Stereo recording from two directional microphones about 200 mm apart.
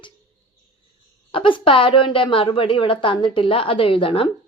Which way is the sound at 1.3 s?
25° left (ahead or behind).